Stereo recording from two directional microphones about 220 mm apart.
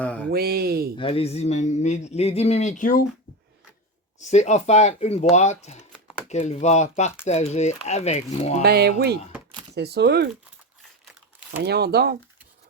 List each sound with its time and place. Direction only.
0.0 s a sound: 5° left (ahead or behind)
0.3 s speech: 45° right (ahead or behind)
0.9 s a man's voice: 25° left (ahead or behind)
4.2 s a man's voice: 30° left (ahead or behind)
8.6 s speech: 45° right (ahead or behind)
11.0 s crumpling: 5° right (ahead or behind)
11.6 s speech: 45° right (ahead or behind)